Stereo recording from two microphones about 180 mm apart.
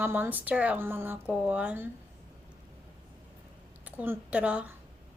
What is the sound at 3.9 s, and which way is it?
Speech, 10° right (ahead or behind).